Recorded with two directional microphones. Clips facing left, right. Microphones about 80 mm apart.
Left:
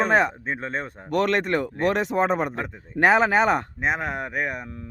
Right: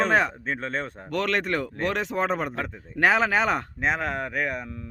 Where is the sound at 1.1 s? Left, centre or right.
Left.